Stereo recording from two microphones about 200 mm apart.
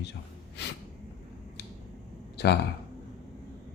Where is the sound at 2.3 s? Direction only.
55° left (ahead or behind).